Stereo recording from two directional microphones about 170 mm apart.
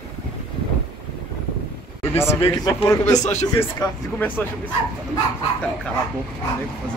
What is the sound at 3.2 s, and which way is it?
Speech, 45° left (ahead or behind).